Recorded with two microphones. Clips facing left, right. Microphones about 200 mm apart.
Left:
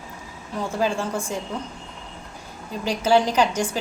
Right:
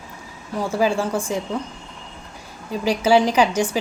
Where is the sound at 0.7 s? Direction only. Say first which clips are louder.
Right 4 dB; 5° right (ahead or behind).